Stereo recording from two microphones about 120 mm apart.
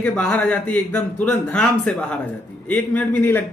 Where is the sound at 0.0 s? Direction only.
10° left (ahead or behind).